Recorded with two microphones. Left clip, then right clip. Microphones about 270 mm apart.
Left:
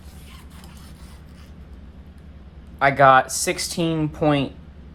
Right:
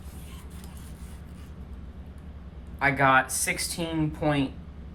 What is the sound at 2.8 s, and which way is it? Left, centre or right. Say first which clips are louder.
Speech: left 7 dB; centre.